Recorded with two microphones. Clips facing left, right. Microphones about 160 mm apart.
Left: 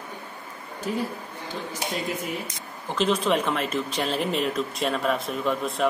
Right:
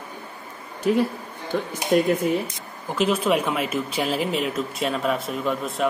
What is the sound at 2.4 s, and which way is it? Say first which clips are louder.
Speech: right 2 dB; 10° right (ahead or behind).